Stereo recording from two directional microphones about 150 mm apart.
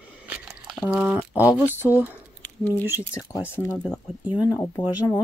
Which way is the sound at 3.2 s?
15° left (ahead or behind).